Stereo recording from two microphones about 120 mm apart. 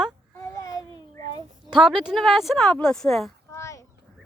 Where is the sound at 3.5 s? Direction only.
25° left (ahead or behind).